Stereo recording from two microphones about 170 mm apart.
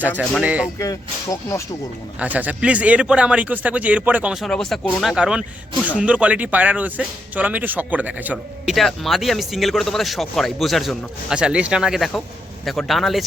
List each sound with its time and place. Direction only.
0.2 s a man's voice: 5° right (ahead or behind)
0.8 s speech: 20° left (ahead or behind)
2.1 s a man's voice: 10° right (ahead or behind)